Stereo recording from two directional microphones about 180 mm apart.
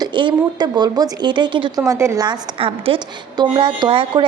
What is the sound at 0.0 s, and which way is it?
A woman's voice, 25° right (ahead or behind).